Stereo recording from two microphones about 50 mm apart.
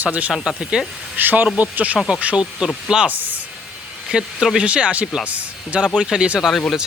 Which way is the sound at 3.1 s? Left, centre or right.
Right.